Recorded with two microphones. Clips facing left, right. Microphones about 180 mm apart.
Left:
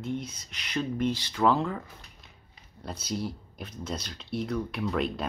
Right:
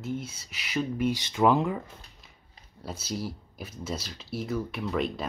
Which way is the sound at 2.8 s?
5° right (ahead or behind).